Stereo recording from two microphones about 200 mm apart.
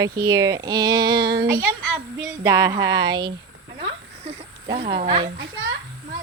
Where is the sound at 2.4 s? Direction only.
15° right (ahead or behind).